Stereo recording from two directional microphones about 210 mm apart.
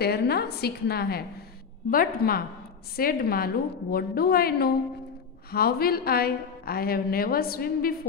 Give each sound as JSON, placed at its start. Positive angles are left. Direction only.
{"t": 0.0, "sound": "a woman's voice", "side_deg": 50}